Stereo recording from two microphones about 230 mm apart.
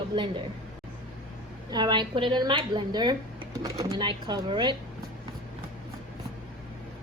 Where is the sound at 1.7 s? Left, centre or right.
Centre.